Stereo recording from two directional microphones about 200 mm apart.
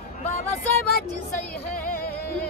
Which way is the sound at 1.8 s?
45° left (ahead or behind).